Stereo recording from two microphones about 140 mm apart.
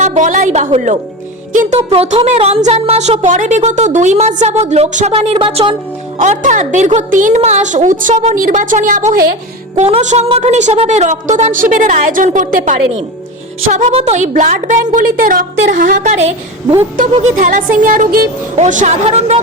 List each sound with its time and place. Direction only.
0.0 s a woman's voice: 60° right (ahead or behind)
1.9 s speech: 45° right (ahead or behind)
5.1 s speech: 40° right (ahead or behind)
6.2 s a woman's voice: 60° right (ahead or behind)
8.4 s a woman's voice: 70° right (ahead or behind)
9.7 s a woman's voice: 55° right (ahead or behind)
13.9 s a woman's voice: 50° right (ahead or behind)
17.1 s speech: 50° right (ahead or behind)
17.3 s a woman's voice: 75° right (ahead or behind)
18.5 s a woman's voice: 60° right (ahead or behind)
19.0 s speech: 50° right (ahead or behind)